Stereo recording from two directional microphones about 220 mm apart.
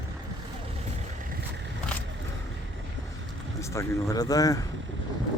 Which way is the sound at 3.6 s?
15° left (ahead or behind).